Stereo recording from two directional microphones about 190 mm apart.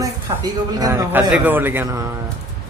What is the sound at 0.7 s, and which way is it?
A man's voice, 20° right (ahead or behind).